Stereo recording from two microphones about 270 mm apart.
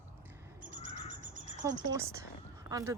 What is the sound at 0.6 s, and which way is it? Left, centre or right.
Crow, right.